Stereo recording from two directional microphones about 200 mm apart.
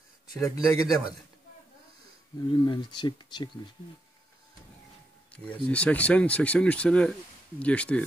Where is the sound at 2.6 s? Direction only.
20° left (ahead or behind).